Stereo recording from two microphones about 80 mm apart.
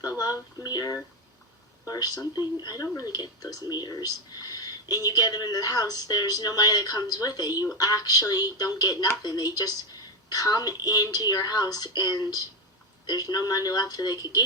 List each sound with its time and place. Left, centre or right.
0.0 s speech: left